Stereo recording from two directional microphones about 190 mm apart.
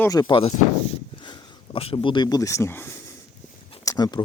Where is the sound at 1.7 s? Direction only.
30° left (ahead or behind).